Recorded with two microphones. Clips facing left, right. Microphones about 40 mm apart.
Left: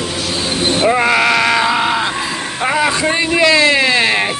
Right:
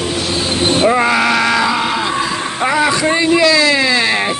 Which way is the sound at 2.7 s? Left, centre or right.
Left.